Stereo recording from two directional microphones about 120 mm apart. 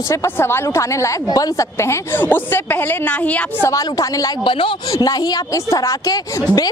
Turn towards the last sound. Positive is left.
turn(degrees=30)  # may be behind; listen again after turning